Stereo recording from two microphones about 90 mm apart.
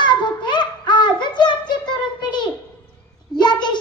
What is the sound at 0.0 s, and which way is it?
Child singing, 60° left (ahead or behind).